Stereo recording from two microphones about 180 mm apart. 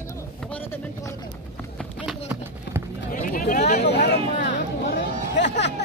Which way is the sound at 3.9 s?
70° left (ahead or behind).